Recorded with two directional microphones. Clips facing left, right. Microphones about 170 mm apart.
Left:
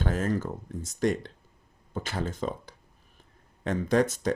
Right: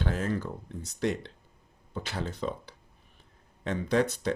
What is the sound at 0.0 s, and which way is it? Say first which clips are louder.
Speech: left 2 dB; 45° left (ahead or behind).